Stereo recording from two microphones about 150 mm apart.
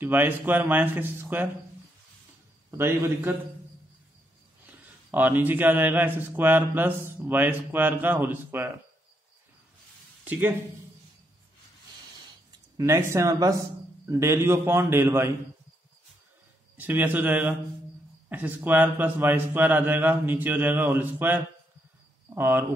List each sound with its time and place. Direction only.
0.0 s a man's voice: 15° right (ahead or behind)
2.8 s a man's voice: 15° right (ahead or behind)
4.6 s a man's voice: 10° right (ahead or behind)
12.7 s a man's voice: 20° right (ahead or behind)
16.7 s a man's voice: 15° right (ahead or behind)